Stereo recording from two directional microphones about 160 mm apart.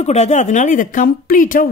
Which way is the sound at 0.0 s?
45° left (ahead or behind).